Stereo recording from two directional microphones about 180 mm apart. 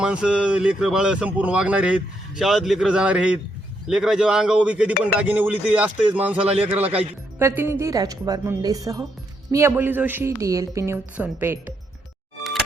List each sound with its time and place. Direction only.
0.0 s a man's voice: 5° right (ahead or behind)
6.5 s speech: 35° right (ahead or behind)
7.3 s a woman's voice: 15° right (ahead or behind)